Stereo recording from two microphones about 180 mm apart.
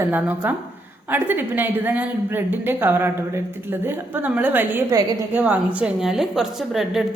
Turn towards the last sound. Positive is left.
turn(degrees=0)  # may be behind; listen again after turning